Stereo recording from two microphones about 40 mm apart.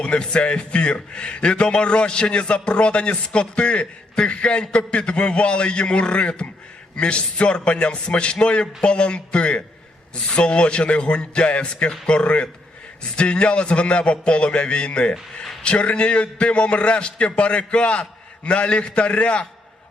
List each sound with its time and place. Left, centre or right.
0.0 s a man's voice: left